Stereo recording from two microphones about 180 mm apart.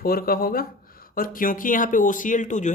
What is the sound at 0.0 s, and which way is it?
Speech, 55° left (ahead or behind).